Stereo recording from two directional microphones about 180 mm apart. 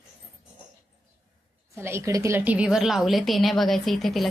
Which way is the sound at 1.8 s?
15° right (ahead or behind).